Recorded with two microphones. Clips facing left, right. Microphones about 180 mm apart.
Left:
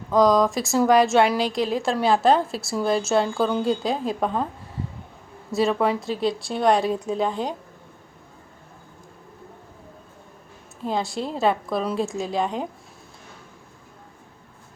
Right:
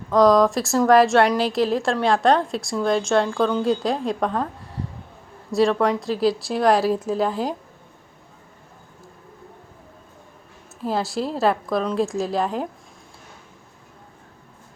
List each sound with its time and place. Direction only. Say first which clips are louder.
0.1 s a woman's voice: right 2 dB; centre (ahead or behind)
5.5 s a woman's voice: right 2 dB; centre (ahead or behind)
10.8 s a woman's voice: right 2 dB; centre (ahead or behind)